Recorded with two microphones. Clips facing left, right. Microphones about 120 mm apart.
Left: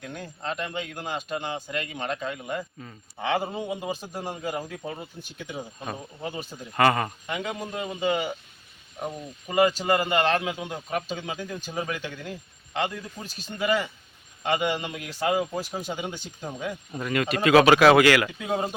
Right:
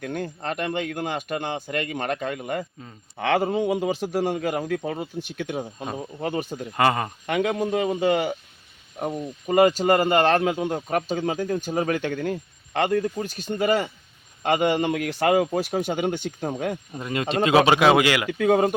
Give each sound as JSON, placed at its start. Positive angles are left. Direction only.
{"t": 0.0, "sound": "a man's voice", "side_deg": -60}
{"t": 3.2, "sound": "a man's voice", "side_deg": -70}
{"t": 6.7, "sound": "speech", "side_deg": -20}
{"t": 7.3, "sound": "a man's voice", "side_deg": -60}
{"t": 9.0, "sound": "speech", "side_deg": -45}
{"t": 13.2, "sound": "a man's voice", "side_deg": -45}
{"t": 16.9, "sound": "speech", "side_deg": -25}
{"t": 18.3, "sound": "a man's voice", "side_deg": -65}